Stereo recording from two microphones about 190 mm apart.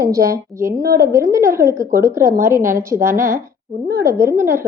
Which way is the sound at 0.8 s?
50° right (ahead or behind).